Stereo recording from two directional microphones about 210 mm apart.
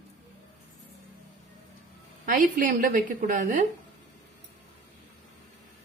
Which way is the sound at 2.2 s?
40° right (ahead or behind).